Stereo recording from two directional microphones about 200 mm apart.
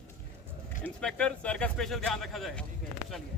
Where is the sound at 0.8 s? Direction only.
5° left (ahead or behind).